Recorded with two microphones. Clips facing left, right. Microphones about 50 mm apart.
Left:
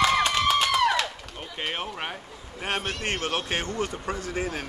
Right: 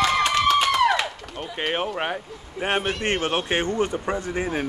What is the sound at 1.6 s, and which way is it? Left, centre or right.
Speech, right.